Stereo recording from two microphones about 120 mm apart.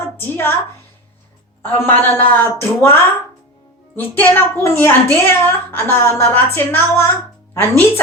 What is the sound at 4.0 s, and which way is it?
A woman's voice, 15° left (ahead or behind).